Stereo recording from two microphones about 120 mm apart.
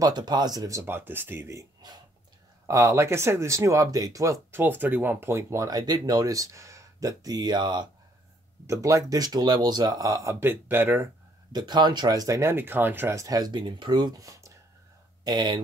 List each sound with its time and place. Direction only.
0.0 s speech: 35° right (ahead or behind)
8.6 s speech: 25° right (ahead or behind)
10.4 s speech: 15° right (ahead or behind)
11.5 s speech: 40° right (ahead or behind)